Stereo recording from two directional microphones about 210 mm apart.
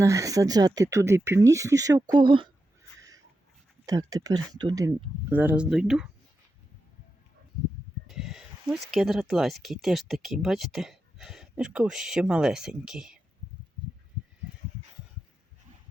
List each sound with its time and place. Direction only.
0.0 s speech: 15° right (ahead or behind)
3.8 s speech: 15° right (ahead or behind)
8.0 s speech: centre (ahead or behind)